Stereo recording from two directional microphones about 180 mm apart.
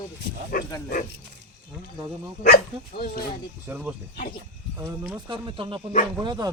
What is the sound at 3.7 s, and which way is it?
Speech, 10° right (ahead or behind).